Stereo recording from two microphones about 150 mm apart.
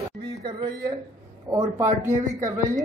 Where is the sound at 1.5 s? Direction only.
20° right (ahead or behind).